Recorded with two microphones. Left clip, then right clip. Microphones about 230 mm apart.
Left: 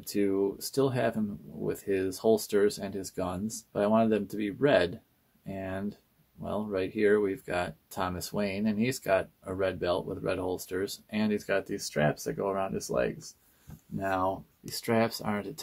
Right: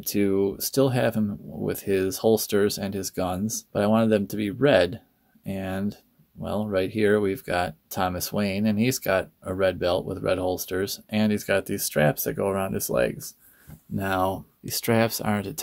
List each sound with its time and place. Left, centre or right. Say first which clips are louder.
0.0 s speech: right 5 dB; right